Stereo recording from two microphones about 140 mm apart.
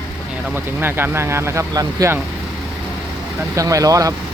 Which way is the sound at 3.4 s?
25° right (ahead or behind).